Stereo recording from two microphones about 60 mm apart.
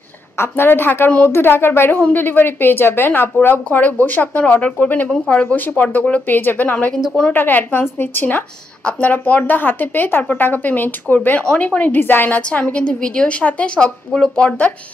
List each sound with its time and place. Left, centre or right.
0.4 s a woman's voice: left
8.8 s a woman's voice: left
12.4 s a woman's voice: left